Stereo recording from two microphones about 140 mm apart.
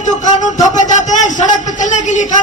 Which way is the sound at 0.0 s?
60° left (ahead or behind).